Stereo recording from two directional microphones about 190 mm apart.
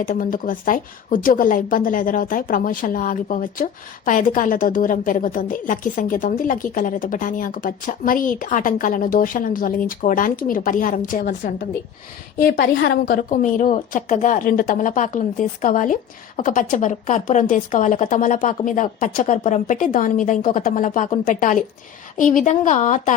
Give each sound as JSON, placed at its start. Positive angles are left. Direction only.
{"t": 0.0, "sound": "a woman's voice", "side_deg": 45}